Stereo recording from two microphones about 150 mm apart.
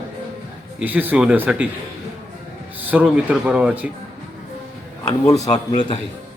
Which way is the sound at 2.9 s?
10° right (ahead or behind).